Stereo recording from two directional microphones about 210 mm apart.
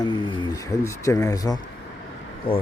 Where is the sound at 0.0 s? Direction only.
20° left (ahead or behind).